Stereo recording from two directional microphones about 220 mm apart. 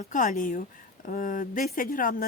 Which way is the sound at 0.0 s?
35° left (ahead or behind).